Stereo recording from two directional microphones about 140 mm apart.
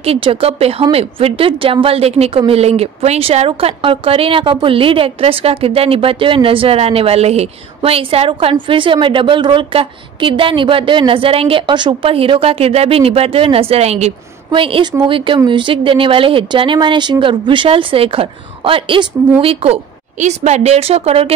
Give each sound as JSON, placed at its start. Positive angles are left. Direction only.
{"t": 0.0, "sound": "a woman's voice", "side_deg": -45}
{"t": 14.5, "sound": "a woman's voice", "side_deg": -40}
{"t": 20.2, "sound": "a woman's voice", "side_deg": -55}